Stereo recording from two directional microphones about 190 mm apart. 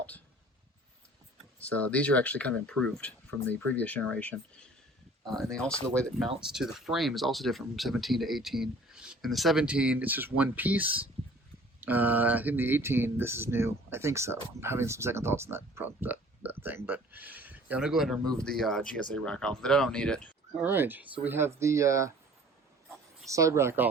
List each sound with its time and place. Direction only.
1.5 s speech: 5° left (ahead or behind)
20.6 s speech: 10° right (ahead or behind)
23.2 s speech: 15° right (ahead or behind)